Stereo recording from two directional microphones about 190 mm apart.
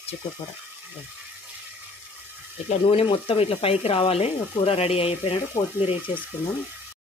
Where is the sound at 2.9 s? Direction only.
30° left (ahead or behind).